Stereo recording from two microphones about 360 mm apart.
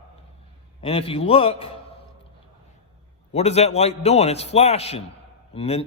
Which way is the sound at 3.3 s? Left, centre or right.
Centre.